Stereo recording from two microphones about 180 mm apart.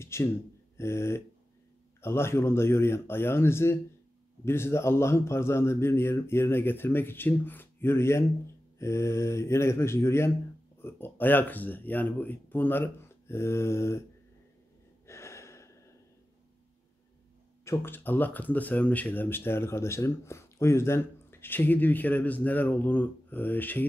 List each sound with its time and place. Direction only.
0.0 s speech: 15° left (ahead or behind)
15.0 s gasp: 15° left (ahead or behind)
17.6 s speech: 15° left (ahead or behind)